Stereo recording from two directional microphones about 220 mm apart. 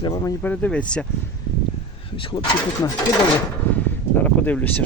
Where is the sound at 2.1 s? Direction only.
25° left (ahead or behind).